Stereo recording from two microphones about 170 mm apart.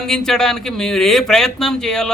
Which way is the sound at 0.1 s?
5° left (ahead or behind).